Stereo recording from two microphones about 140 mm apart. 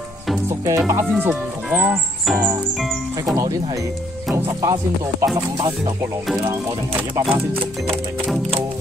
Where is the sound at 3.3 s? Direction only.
25° right (ahead or behind).